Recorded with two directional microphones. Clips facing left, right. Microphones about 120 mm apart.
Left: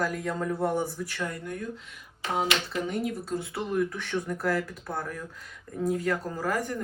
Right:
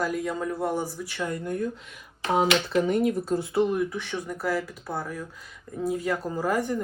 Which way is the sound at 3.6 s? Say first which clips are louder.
Right 2 dB; 10° right (ahead or behind).